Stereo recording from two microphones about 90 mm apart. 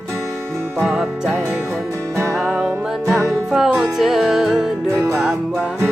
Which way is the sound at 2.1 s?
30° right (ahead or behind).